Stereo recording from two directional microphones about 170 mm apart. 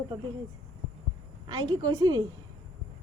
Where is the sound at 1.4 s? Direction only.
25° right (ahead or behind).